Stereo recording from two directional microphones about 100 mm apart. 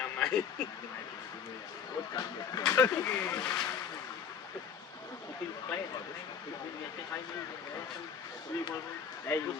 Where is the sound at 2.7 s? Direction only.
30° left (ahead or behind).